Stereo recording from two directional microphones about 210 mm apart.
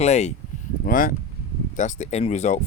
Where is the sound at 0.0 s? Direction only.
30° left (ahead or behind).